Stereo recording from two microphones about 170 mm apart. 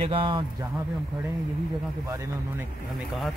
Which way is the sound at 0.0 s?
30° right (ahead or behind).